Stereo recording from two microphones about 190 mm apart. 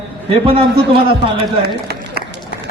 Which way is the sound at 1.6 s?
60° right (ahead or behind).